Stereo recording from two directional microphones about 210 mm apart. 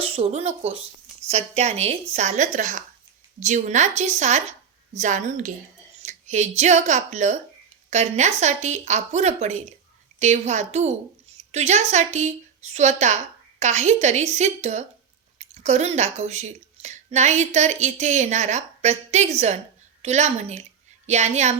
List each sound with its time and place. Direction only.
0.0 s speech: 30° right (ahead or behind)
6.0 s a sound: 35° right (ahead or behind)
6.6 s speech: 35° right (ahead or behind)